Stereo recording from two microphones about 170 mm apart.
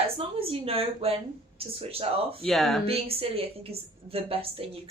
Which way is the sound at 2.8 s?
35° right (ahead or behind).